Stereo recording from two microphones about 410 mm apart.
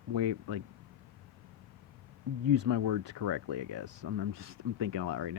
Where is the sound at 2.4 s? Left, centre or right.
Right.